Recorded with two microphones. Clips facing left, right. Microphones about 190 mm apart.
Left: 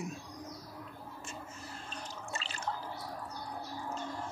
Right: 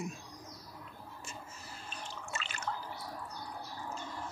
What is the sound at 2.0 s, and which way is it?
Water, 35° left (ahead or behind).